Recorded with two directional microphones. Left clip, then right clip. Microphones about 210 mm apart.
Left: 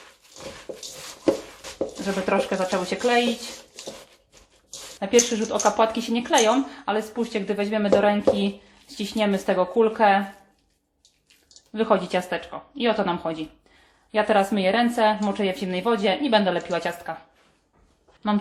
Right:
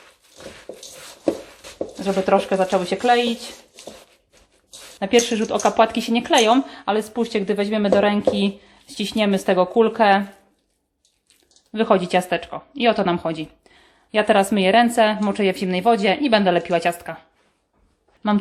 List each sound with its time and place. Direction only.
2.0 s speech: 50° right (ahead or behind)
4.9 s speech: 50° right (ahead or behind)
11.7 s speech: 50° right (ahead or behind)
18.2 s speech: 45° right (ahead or behind)